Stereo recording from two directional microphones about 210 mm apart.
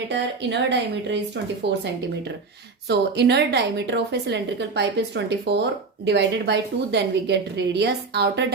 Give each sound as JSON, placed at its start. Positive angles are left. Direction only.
{"t": 0.1, "sound": "speech", "side_deg": -55}
{"t": 3.2, "sound": "a woman's voice", "side_deg": -50}